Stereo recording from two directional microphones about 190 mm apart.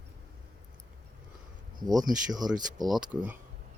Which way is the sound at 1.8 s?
20° right (ahead or behind).